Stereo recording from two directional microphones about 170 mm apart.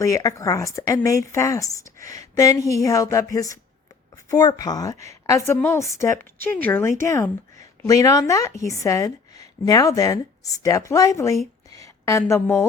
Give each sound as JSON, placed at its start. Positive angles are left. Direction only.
{"t": 0.0, "sound": "a woman's voice", "side_deg": 20}